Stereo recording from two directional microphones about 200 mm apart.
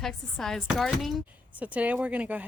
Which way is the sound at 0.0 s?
Centre (ahead or behind).